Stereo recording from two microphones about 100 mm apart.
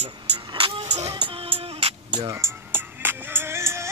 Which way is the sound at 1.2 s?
75° right (ahead or behind).